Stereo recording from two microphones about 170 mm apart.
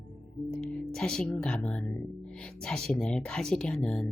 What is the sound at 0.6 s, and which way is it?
Speech, 5° left (ahead or behind).